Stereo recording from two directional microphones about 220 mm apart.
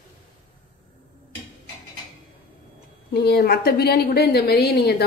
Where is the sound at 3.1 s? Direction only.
45° left (ahead or behind).